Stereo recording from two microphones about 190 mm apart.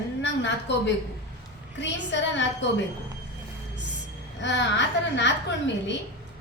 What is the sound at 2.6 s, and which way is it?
Speech, 70° left (ahead or behind).